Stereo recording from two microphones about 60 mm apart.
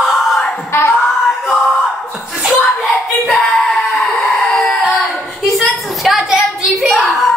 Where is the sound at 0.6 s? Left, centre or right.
Left.